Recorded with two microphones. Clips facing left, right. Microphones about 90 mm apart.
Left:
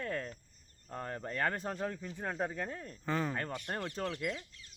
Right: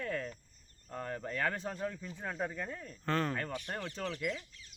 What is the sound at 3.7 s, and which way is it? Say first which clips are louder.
Speech: left 2 dB; 30° left (ahead or behind).